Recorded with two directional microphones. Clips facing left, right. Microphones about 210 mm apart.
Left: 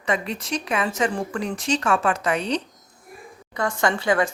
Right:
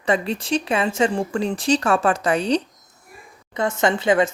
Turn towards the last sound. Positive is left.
turn(degrees=-20)  # may be behind; listen again after turning